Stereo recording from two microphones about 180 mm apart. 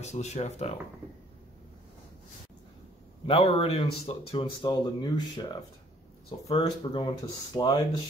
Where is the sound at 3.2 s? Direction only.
30° left (ahead or behind).